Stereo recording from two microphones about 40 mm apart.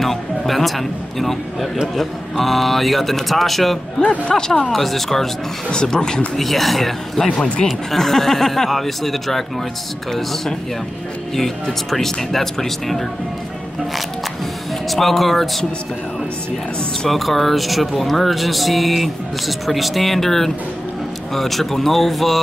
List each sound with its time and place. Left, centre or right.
0.0 s a man's voice: centre
4.3 s speech: centre
5.7 s speech: centre
6.3 s speech: centre
11.3 s speech: centre
14.9 s speech: centre
17.1 s speech: centre